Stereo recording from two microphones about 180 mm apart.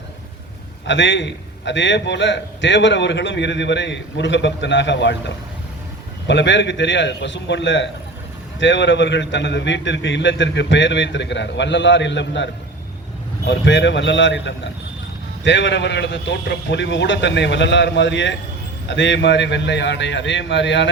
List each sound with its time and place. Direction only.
0.9 s a man's voice: 90° left
13.5 s a man's voice: 85° left